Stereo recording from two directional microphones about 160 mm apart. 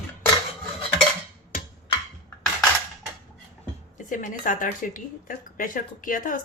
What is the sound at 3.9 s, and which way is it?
A woman's voice, 55° left (ahead or behind).